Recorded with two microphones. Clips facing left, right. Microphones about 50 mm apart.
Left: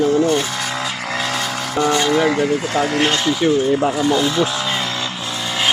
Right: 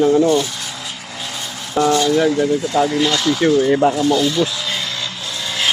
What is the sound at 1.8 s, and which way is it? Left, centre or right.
Speech, left.